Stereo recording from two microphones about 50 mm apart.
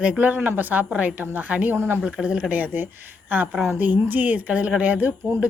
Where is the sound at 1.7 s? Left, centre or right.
Right.